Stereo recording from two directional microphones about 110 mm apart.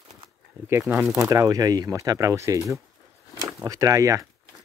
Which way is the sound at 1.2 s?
30° right (ahead or behind).